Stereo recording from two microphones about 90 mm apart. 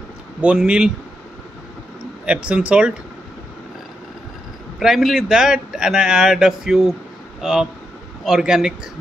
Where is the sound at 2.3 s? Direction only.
10° right (ahead or behind).